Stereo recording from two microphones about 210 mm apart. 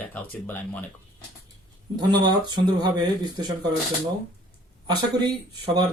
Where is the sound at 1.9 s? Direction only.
20° right (ahead or behind).